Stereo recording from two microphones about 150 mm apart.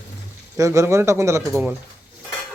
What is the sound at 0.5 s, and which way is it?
Speech, 20° right (ahead or behind).